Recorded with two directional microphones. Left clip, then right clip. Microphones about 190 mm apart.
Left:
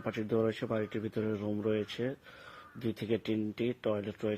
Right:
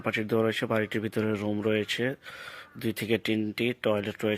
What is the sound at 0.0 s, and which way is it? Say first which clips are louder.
Speech: right 5 dB; 15° right (ahead or behind).